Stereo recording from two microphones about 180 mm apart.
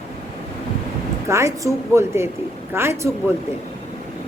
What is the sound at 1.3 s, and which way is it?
A woman's voice, 15° right (ahead or behind).